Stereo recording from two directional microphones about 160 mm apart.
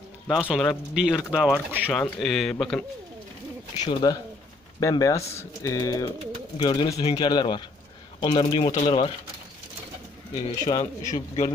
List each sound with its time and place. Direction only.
0.3 s speech: 5° right (ahead or behind)
1.9 s speech: 5° left (ahead or behind)
3.9 s speech: 25° left (ahead or behind)
10.3 s speech: 30° left (ahead or behind)
11.1 s speech: 45° left (ahead or behind)